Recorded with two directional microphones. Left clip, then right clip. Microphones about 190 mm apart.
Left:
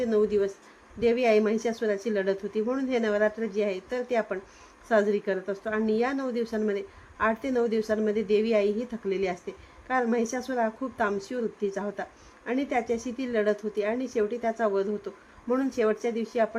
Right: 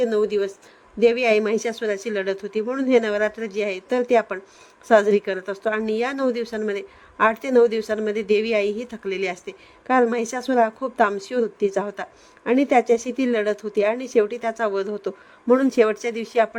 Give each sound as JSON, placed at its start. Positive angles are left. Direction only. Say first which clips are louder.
{"t": 0.0, "sound": "a woman's voice", "louder": "right 4 dB", "side_deg": -45}